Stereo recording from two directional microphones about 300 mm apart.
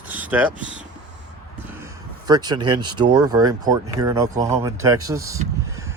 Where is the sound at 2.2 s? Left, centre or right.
Centre.